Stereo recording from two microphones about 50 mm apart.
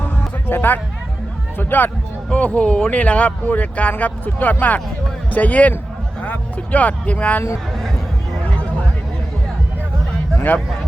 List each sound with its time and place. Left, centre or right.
0.4 s speech: left
2.3 s speech: left